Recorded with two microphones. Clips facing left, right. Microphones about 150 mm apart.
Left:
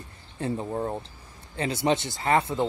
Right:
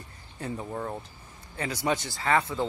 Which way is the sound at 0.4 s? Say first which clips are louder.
Left 5 dB; 25° left (ahead or behind).